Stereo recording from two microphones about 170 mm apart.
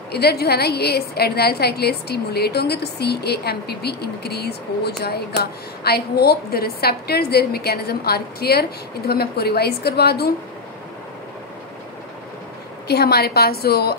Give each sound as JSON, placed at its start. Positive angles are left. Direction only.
{"t": 0.1, "sound": "a woman's voice", "side_deg": 70}
{"t": 12.8, "sound": "a woman's voice", "side_deg": 70}